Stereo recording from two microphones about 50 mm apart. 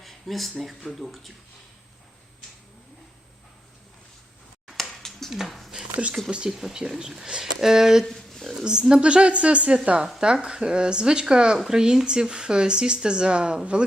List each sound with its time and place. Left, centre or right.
0.0 s a sound: centre
0.6 s speech: centre
5.3 s speech: centre
6.6 s speech: centre
8.0 s a sound: centre
8.6 s a woman's voice: centre
11.5 s speech: centre
11.8 s speech: centre